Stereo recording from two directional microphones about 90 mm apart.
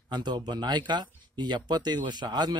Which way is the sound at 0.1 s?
55° right (ahead or behind).